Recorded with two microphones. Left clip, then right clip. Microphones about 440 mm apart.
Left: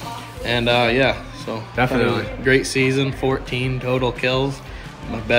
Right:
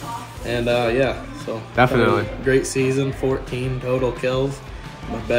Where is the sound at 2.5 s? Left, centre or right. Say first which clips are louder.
Left 2 dB; centre.